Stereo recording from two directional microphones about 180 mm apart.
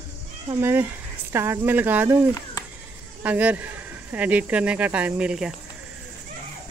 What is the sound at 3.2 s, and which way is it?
Speech, 10° right (ahead or behind).